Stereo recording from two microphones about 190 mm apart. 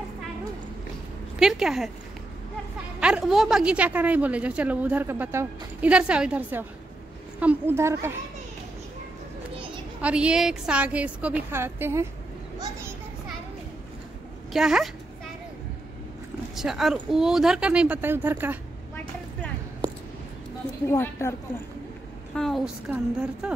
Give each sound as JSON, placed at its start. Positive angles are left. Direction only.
{"t": 1.4, "sound": "a woman's voice", "side_deg": 0}
{"t": 3.0, "sound": "a woman's voice", "side_deg": -5}
{"t": 10.0, "sound": "a woman's voice", "side_deg": -5}
{"t": 14.5, "sound": "a woman's voice", "side_deg": 0}
{"t": 16.5, "sound": "a woman's voice", "side_deg": 0}
{"t": 20.9, "sound": "a woman's voice", "side_deg": 15}
{"t": 22.3, "sound": "a woman's voice", "side_deg": 0}